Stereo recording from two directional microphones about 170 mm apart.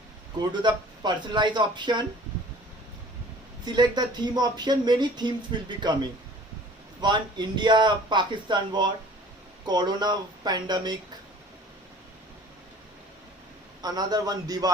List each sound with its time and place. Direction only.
0.6 s speech: 25° right (ahead or behind)
3.7 s speech: 25° right (ahead or behind)
13.8 s speech: 25° right (ahead or behind)